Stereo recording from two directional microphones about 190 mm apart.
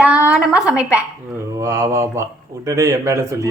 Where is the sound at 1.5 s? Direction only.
15° right (ahead or behind).